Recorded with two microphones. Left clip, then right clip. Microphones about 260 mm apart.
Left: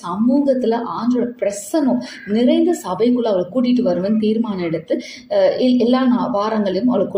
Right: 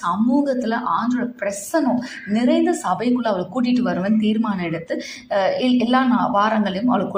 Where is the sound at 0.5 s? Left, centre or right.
Centre.